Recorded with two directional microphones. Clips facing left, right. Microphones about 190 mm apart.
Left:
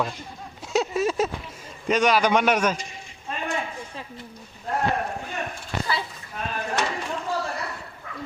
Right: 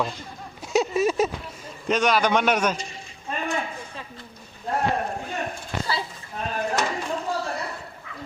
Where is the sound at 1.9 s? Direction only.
10° left (ahead or behind).